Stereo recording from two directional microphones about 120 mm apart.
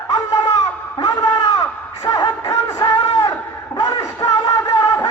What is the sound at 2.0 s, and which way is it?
Music, 25° left (ahead or behind).